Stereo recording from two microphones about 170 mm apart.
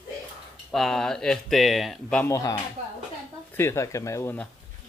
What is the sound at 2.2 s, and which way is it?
Speech, 20° left (ahead or behind).